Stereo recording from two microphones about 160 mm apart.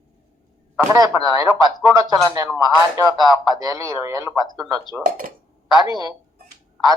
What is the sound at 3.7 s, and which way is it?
Speech, 20° right (ahead or behind).